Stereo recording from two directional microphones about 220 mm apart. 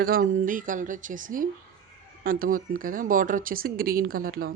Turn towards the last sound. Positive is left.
turn(degrees=-40)  # may be behind; listen again after turning